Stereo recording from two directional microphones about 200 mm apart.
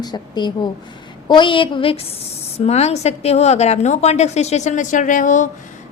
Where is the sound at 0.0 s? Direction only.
20° left (ahead or behind).